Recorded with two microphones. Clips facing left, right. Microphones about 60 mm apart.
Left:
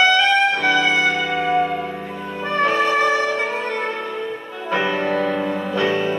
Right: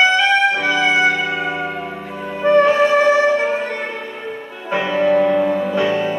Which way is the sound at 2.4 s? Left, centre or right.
Right.